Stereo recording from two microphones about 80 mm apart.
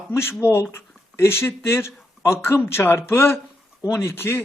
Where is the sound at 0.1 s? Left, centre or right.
Left.